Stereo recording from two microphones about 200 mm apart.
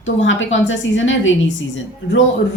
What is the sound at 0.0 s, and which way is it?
A woman's voice, 70° left (ahead or behind).